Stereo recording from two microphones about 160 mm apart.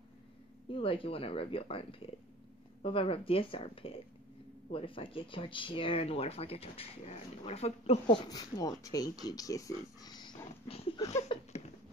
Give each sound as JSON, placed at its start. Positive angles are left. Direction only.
{"t": 0.7, "sound": "speech", "side_deg": 35}
{"t": 8.3, "sound": "speech", "side_deg": 25}
{"t": 11.1, "sound": "a sound", "side_deg": 45}